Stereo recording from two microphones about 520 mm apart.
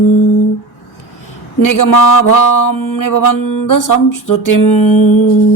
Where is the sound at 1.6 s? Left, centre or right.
Left.